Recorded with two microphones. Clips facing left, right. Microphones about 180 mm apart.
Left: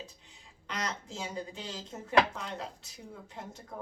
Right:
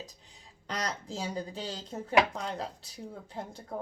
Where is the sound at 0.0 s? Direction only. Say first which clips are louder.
Right 1 dB; 35° right (ahead or behind).